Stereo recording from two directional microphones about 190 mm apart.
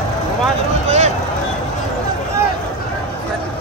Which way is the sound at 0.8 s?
35° right (ahead or behind).